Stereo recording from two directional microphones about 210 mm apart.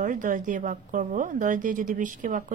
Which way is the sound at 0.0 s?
40° right (ahead or behind).